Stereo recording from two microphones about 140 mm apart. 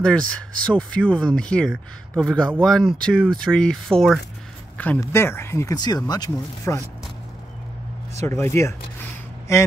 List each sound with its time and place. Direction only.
0.0 s speech: 5° left (ahead or behind)
4.7 s speech: 10° left (ahead or behind)
8.2 s a sound: 20° left (ahead or behind)